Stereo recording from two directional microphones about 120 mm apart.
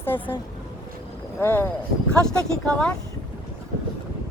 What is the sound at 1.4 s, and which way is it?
Speech, 15° left (ahead or behind).